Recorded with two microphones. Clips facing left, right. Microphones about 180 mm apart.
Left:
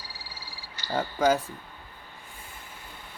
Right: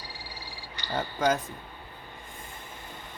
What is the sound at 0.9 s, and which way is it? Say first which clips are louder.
Speech: left 3 dB; 10° left (ahead or behind).